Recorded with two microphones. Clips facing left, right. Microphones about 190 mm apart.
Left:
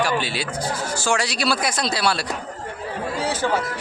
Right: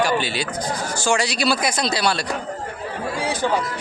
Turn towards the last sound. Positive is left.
turn(degrees=-15)  # may be behind; listen again after turning